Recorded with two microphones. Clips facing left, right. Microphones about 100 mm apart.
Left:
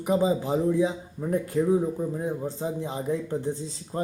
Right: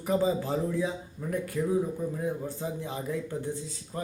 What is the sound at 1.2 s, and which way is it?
Speech, 30° left (ahead or behind).